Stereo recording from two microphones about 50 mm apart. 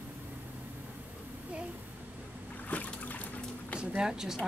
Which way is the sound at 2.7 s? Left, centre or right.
Left.